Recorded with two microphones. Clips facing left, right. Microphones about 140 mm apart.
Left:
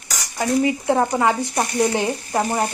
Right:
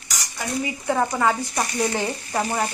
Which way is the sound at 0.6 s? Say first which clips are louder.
Left 2 dB; 25° left (ahead or behind).